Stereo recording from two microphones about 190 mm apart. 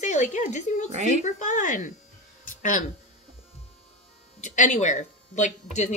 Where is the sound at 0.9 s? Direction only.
35° right (ahead or behind).